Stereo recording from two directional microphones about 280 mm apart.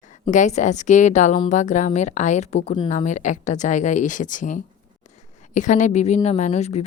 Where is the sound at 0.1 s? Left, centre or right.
Left.